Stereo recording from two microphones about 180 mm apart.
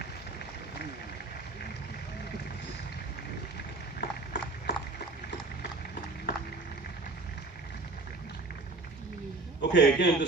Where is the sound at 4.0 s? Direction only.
65° left (ahead or behind).